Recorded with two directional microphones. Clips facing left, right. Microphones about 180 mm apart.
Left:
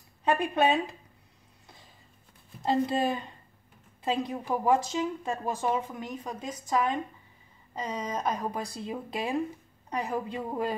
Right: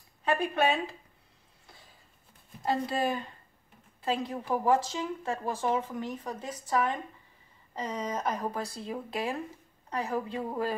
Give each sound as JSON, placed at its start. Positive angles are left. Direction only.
{"t": 0.2, "sound": "a woman's voice", "side_deg": 20}
{"t": 2.6, "sound": "a woman's voice", "side_deg": 20}